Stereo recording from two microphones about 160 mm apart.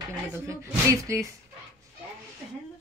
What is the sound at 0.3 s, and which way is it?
A woman's voice, 15° right (ahead or behind).